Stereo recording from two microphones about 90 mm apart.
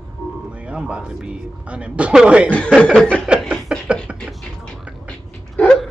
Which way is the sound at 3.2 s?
10° right (ahead or behind).